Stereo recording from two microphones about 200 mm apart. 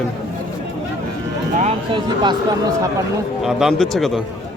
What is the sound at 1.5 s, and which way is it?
Music, 35° right (ahead or behind).